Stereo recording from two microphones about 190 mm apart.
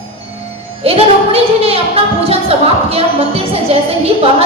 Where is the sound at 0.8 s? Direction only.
30° right (ahead or behind).